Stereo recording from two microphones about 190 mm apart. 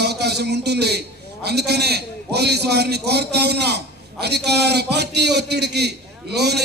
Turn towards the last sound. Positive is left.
turn(degrees=-60)  # may be behind; listen again after turning